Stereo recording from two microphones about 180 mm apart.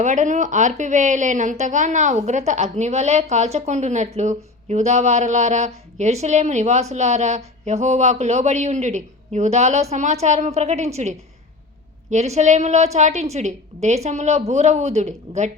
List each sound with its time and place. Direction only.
0.0 s a woman's voice: 40° right (ahead or behind)
12.1 s a woman's voice: 40° right (ahead or behind)